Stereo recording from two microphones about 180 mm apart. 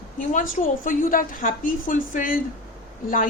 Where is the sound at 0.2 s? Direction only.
50° left (ahead or behind).